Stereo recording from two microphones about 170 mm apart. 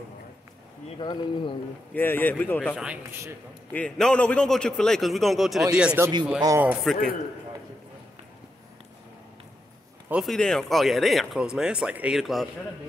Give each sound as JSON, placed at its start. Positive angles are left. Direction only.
{"t": 0.9, "sound": "speech", "side_deg": 25}
{"t": 2.0, "sound": "speech", "side_deg": 10}
{"t": 2.7, "sound": "a man's voice", "side_deg": -5}
{"t": 3.7, "sound": "speech", "side_deg": 5}
{"t": 10.0, "sound": "speech", "side_deg": -5}